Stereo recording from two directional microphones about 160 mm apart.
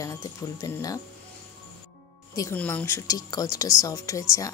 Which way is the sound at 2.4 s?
10° left (ahead or behind).